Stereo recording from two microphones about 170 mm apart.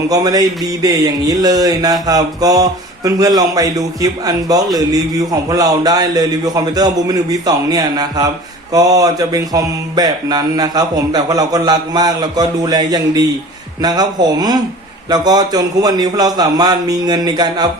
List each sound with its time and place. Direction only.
0.1 s speech: 20° right (ahead or behind)